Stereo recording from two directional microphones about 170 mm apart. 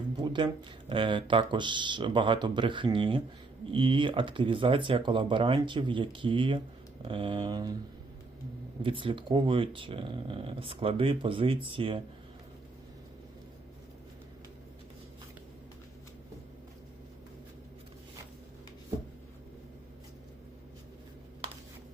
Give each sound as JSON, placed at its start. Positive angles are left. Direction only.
{"t": 0.2, "sound": "speech", "side_deg": -25}
{"t": 8.8, "sound": "speech", "side_deg": -30}